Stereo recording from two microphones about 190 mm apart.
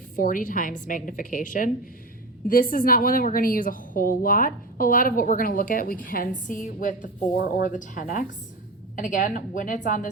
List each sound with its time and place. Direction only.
0.2 s a woman's voice: 45° left (ahead or behind)